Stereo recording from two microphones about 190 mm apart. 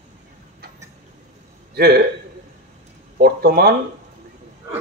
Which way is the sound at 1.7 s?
55° right (ahead or behind).